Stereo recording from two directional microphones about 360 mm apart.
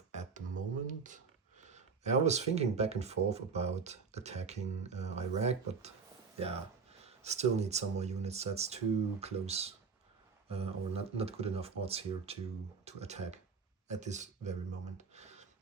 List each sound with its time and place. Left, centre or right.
0.1 s speech: centre
7.0 s speech: centre
14.9 s a sound: centre